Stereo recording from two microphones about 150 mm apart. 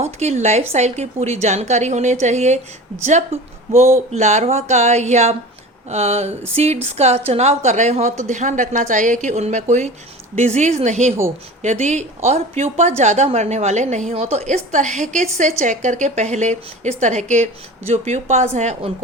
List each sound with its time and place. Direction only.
0.0 s a woman's voice: 45° right (ahead or behind)